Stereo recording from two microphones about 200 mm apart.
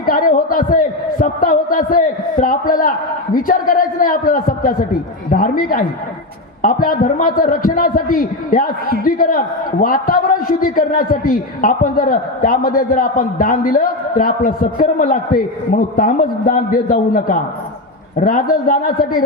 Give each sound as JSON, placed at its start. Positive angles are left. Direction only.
{"t": 0.0, "sound": "a man's voice", "side_deg": 45}